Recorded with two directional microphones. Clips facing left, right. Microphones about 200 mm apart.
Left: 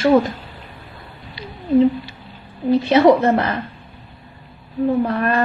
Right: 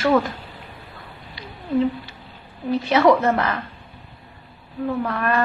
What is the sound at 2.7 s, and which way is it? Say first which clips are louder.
Speech: left 4 dB; 30° left (ahead or behind).